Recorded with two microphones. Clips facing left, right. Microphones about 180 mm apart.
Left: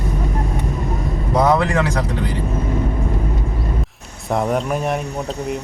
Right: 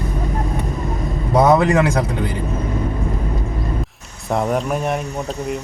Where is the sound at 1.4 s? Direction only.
20° right (ahead or behind).